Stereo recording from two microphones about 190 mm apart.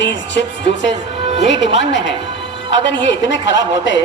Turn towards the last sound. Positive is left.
turn(degrees=70)  # may be behind; listen again after turning